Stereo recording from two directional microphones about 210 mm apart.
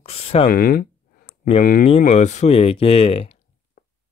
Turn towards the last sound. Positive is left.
turn(degrees=25)  # may be behind; listen again after turning